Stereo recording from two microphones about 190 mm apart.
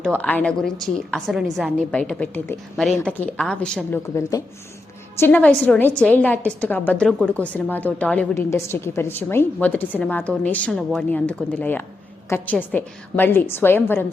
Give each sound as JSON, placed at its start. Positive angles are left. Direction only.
{"t": 0.2, "sound": "a woman's voice", "side_deg": 10}
{"t": 4.0, "sound": "a woman's voice", "side_deg": 15}